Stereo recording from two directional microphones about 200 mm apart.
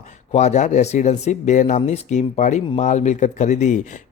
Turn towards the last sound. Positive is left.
turn(degrees=35)  # may be behind; listen again after turning